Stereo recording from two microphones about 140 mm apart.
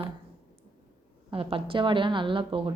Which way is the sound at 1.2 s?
40° right (ahead or behind).